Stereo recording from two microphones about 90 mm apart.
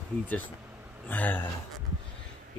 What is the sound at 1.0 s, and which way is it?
Speech, 20° left (ahead or behind).